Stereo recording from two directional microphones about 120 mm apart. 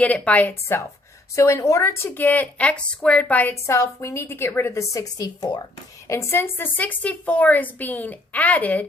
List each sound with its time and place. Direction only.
0.0 s a woman's voice: 10° left (ahead or behind)
1.4 s a woman's voice: 25° left (ahead or behind)
3.7 s a woman's voice: 25° left (ahead or behind)